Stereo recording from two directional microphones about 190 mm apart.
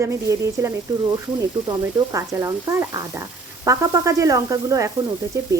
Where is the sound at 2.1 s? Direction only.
15° right (ahead or behind).